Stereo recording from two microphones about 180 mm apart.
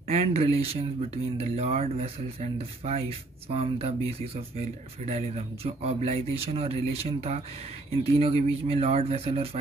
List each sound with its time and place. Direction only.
0.1 s speech: 35° right (ahead or behind)